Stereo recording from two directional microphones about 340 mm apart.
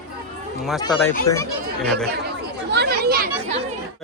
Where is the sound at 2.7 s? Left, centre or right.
Right.